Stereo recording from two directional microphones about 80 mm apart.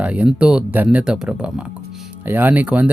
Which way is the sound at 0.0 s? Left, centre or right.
Centre.